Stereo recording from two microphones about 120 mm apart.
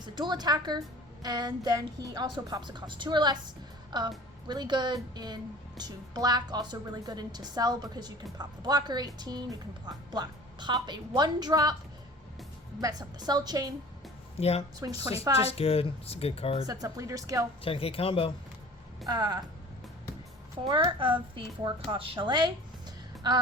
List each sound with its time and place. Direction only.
0.0 s a woman's voice: 35° right (ahead or behind)
12.8 s a woman's voice: 35° right (ahead or behind)
14.3 s speech: 60° left (ahead or behind)
14.8 s a woman's voice: 30° right (ahead or behind)
15.4 s speech: 55° left (ahead or behind)
16.6 s speech: 30° right (ahead or behind)
17.6 s speech: 50° left (ahead or behind)
19.0 s a woman's voice: 35° right (ahead or behind)
20.7 s a woman's voice: 40° right (ahead or behind)